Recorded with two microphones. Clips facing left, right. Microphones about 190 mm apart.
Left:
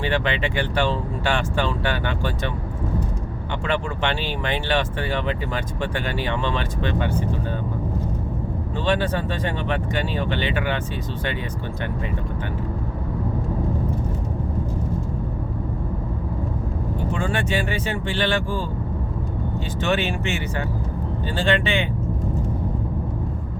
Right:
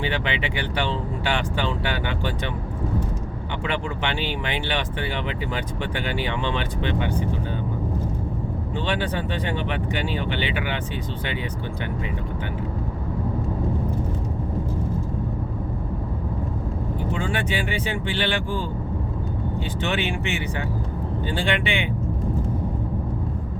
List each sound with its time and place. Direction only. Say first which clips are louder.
0.0 s speech: left 3 dB; 15° right (ahead or behind)
3.7 s speech: left 3 dB; 15° right (ahead or behind)
8.9 s speech: left 5 dB; 15° right (ahead or behind)
17.2 s speech: left 2 dB; 15° right (ahead or behind)
19.8 s speech: left 4 dB; 15° right (ahead or behind)